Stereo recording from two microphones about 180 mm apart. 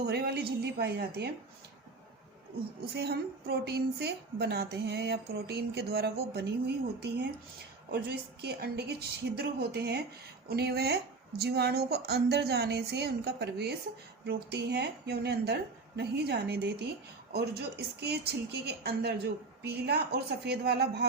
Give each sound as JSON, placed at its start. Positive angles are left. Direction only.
{"t": 0.1, "sound": "a woman's voice", "side_deg": -65}
{"t": 2.9, "sound": "a woman's voice", "side_deg": -65}